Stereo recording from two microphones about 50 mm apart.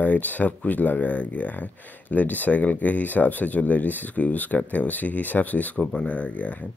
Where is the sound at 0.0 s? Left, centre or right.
Left.